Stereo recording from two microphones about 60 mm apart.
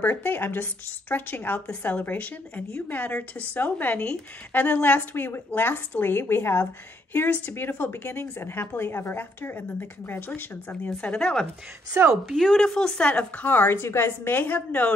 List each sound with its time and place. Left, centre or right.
0.0 s a woman's voice: left
4.5 s a woman's voice: left
11.1 s speech: centre
12.1 s a woman's voice: centre; by 14.4 s left
14.4 s a woman's voice: left